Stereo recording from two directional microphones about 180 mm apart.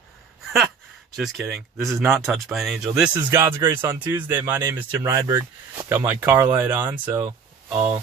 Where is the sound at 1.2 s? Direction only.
Centre (ahead or behind).